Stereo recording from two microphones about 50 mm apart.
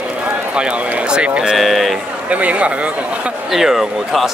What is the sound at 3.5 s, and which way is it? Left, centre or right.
Speech, centre.